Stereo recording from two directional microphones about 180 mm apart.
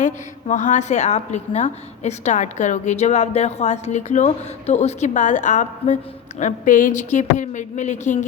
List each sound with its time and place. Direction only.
0.0 s a woman's voice: 45° left (ahead or behind)